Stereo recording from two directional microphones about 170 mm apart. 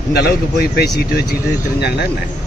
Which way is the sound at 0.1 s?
70° left (ahead or behind).